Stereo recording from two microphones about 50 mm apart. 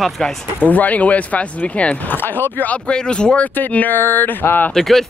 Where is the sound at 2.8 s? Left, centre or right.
Centre.